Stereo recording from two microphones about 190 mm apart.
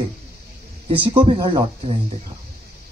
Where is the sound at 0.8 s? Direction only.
25° right (ahead or behind).